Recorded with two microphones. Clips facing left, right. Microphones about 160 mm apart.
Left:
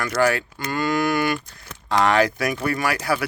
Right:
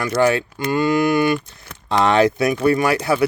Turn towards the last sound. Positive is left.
turn(degrees=-25)  # may be behind; listen again after turning